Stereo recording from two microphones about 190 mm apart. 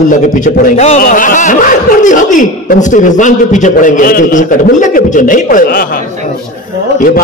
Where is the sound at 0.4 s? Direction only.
40° left (ahead or behind).